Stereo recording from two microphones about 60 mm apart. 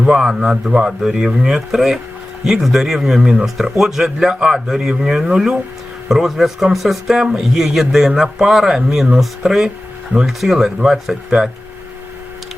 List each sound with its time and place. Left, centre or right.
0.2 s speech: centre
0.4 s speech: centre
0.9 s speech: centre